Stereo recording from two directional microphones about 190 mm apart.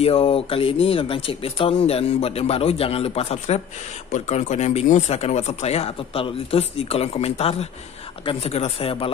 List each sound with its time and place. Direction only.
0.0 s a man's voice: 30° left (ahead or behind)